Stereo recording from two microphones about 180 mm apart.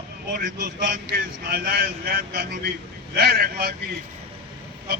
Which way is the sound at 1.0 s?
55° right (ahead or behind).